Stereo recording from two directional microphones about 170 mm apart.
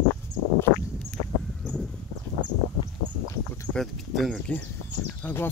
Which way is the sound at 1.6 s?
5° left (ahead or behind).